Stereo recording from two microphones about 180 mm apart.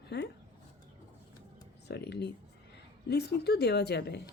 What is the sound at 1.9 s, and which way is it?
A woman's voice, 65° left (ahead or behind).